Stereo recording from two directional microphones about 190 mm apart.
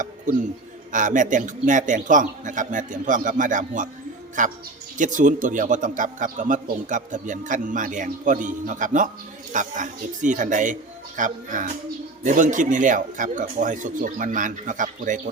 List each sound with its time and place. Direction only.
0.0 s a man's voice: 40° right (ahead or behind)